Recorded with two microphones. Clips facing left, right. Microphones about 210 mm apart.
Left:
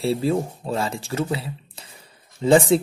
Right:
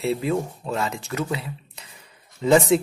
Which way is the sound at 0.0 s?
35° left (ahead or behind).